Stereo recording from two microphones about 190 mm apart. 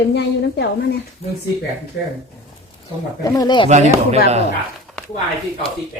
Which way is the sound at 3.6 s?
35° right (ahead or behind).